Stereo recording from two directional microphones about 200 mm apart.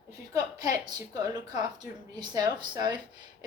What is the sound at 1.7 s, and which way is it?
Speech, 20° right (ahead or behind).